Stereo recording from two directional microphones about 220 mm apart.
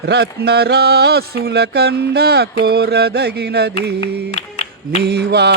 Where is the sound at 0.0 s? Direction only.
50° right (ahead or behind).